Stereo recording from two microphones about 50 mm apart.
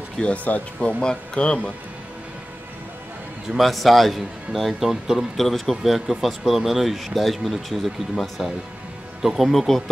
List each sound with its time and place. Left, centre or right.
0.2 s speech: centre
3.4 s speech: centre
5.4 s speech: centre